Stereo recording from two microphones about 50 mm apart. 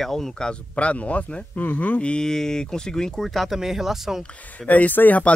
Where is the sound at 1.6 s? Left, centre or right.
Left.